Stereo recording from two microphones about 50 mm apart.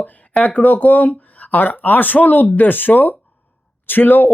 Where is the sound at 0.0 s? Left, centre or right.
Left.